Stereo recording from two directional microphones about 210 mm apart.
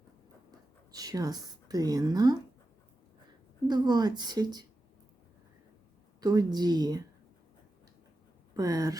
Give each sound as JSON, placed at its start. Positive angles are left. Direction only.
{"t": 0.9, "sound": "speech", "side_deg": -15}
{"t": 3.7, "sound": "speech", "side_deg": -20}
{"t": 6.1, "sound": "speech", "side_deg": -20}
{"t": 8.5, "sound": "speech", "side_deg": -15}